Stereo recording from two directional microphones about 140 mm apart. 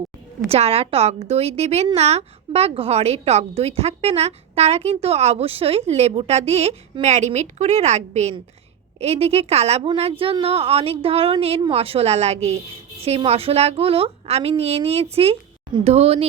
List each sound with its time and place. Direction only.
0.5 s speech: 45° right (ahead or behind)